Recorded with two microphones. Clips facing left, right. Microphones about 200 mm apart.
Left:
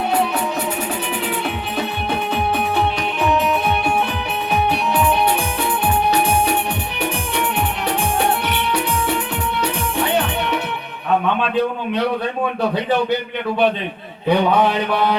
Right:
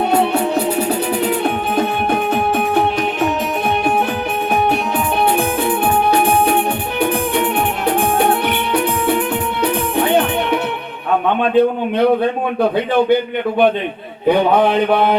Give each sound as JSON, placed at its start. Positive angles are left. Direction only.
{"t": 1.5, "sound": "music", "side_deg": -50}
{"t": 14.3, "sound": "mantra", "side_deg": -55}